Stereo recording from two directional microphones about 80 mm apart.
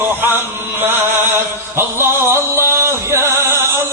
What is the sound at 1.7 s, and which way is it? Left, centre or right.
Music, right.